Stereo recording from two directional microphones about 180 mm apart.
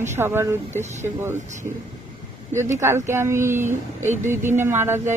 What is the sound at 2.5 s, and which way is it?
Speech, 15° right (ahead or behind).